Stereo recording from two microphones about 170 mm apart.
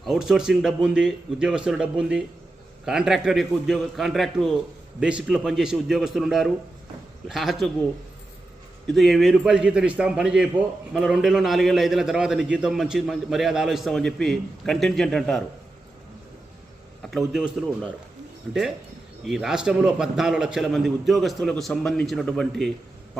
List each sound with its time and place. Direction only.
0.0 s a man's voice: centre (ahead or behind)
9.0 s a man's voice: centre (ahead or behind)
17.0 s speech: centre (ahead or behind)
19.2 s a man's voice: centre (ahead or behind)